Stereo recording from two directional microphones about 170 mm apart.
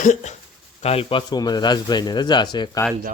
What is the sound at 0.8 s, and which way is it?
Speech, 30° left (ahead or behind).